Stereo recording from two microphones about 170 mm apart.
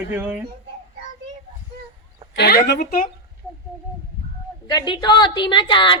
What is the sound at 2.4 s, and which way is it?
Speech, 70° left (ahead or behind).